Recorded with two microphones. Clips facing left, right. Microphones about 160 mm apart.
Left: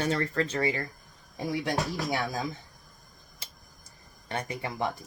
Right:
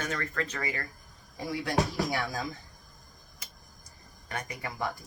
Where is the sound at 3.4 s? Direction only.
30° left (ahead or behind).